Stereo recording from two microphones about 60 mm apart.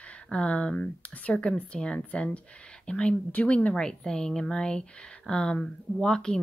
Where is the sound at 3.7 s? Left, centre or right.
Centre.